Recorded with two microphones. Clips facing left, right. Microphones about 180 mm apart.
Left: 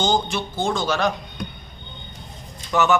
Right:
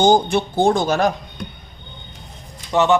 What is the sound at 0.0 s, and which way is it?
A man's voice, 55° right (ahead or behind).